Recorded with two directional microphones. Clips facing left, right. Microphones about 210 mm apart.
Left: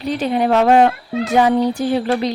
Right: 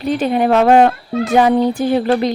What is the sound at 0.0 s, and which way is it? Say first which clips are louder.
Speech: right 3 dB; 50° right (ahead or behind).